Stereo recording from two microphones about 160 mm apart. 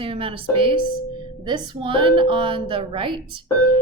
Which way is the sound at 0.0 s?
35° right (ahead or behind).